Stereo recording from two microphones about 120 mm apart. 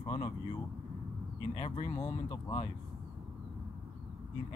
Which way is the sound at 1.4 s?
45° left (ahead or behind).